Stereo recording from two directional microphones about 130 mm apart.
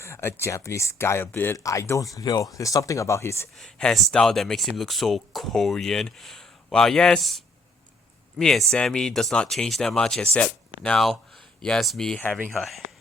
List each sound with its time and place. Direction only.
0.0 s speech: 20° left (ahead or behind)
3.6 s speech: 5° left (ahead or behind)